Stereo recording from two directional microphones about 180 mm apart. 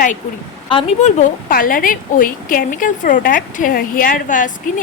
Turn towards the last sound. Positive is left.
turn(degrees=45)  # may be behind; listen again after turning